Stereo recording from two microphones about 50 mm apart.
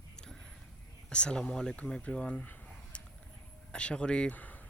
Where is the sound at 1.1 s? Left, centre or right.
Centre.